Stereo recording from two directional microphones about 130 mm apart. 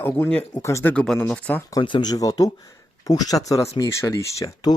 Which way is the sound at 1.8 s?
35° left (ahead or behind).